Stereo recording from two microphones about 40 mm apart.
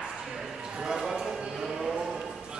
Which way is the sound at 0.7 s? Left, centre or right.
Centre.